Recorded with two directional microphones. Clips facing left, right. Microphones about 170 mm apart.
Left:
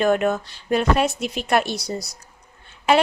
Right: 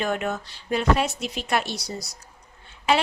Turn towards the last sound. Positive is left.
turn(degrees=55)  # may be behind; listen again after turning